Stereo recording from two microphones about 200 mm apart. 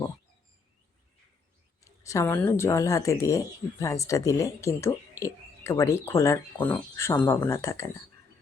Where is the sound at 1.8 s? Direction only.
15° left (ahead or behind).